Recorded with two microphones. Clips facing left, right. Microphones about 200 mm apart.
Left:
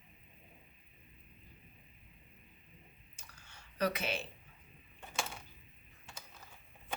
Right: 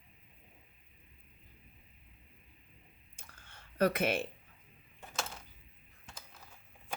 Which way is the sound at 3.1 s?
55° right (ahead or behind).